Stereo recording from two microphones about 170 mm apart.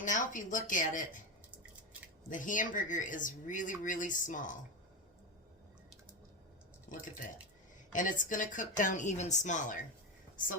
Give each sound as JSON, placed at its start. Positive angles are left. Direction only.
{"t": 0.0, "sound": "speech", "side_deg": 50}
{"t": 2.3, "sound": "a woman's voice", "side_deg": 50}
{"t": 7.9, "sound": "a woman's voice", "side_deg": 50}